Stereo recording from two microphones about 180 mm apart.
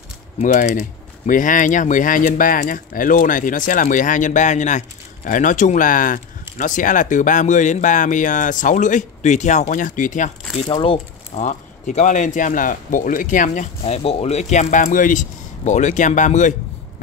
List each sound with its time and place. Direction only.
0.4 s speech: 45° left (ahead or behind)
10.7 s speech: 30° left (ahead or behind)